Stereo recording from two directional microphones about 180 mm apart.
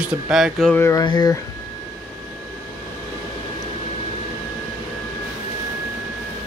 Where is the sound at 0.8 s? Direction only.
20° left (ahead or behind).